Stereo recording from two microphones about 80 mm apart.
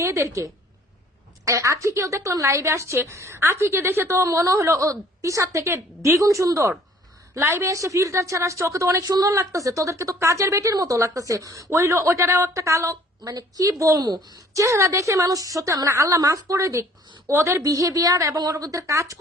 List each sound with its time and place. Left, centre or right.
0.0 s a woman's voice: right
14.0 s a woman's voice: right
14.5 s a woman's voice: right